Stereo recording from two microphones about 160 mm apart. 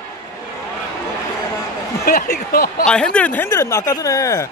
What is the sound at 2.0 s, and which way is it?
Speech, 70° left (ahead or behind).